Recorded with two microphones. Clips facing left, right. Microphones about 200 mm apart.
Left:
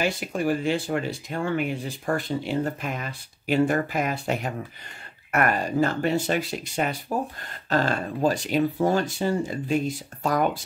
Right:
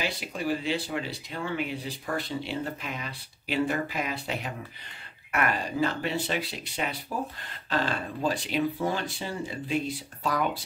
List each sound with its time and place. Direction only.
0.0 s speech: 50° left (ahead or behind)